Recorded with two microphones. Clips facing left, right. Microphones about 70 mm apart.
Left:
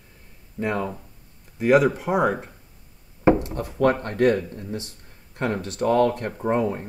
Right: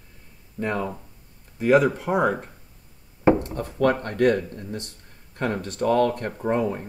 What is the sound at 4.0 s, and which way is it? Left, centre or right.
Speech, left.